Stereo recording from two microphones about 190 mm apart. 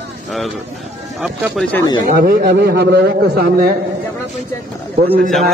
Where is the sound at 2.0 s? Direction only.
50° right (ahead or behind).